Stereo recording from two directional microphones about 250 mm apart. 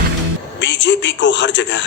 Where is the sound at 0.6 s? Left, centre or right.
Left.